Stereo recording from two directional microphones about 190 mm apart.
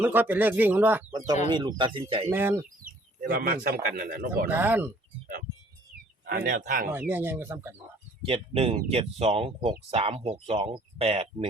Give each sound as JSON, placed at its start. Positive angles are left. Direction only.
{"t": 0.0, "sound": "speech", "side_deg": -10}
{"t": 1.5, "sound": "speech", "side_deg": -25}
{"t": 2.3, "sound": "speech", "side_deg": -10}
{"t": 2.8, "sound": "bird", "side_deg": -45}
{"t": 3.8, "sound": "speech", "side_deg": -50}
{"t": 4.4, "sound": "speech", "side_deg": -10}
{"t": 6.2, "sound": "speech", "side_deg": -45}
{"t": 7.1, "sound": "speech", "side_deg": -10}
{"t": 8.2, "sound": "speech", "side_deg": -30}